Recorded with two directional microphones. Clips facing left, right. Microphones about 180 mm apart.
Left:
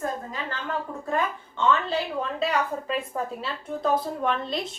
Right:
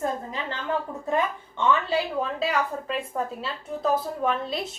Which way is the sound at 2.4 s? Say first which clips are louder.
Even; centre (ahead or behind).